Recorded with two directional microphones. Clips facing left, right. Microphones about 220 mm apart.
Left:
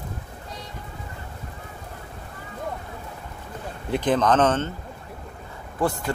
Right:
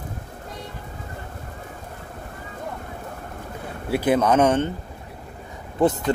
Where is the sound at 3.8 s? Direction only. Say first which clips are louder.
Right 2 dB; 10° right (ahead or behind).